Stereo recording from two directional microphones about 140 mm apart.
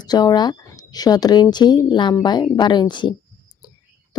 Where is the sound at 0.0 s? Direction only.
30° left (ahead or behind).